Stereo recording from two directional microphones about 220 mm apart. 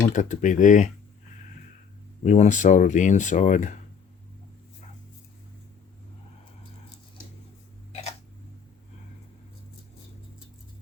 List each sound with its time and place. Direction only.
0.1 s speech: 35° left (ahead or behind)
2.2 s speech: 35° left (ahead or behind)